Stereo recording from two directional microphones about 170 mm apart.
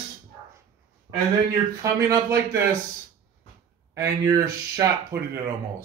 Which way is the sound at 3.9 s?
20° right (ahead or behind).